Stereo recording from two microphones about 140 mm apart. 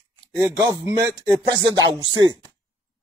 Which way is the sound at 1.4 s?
30° right (ahead or behind).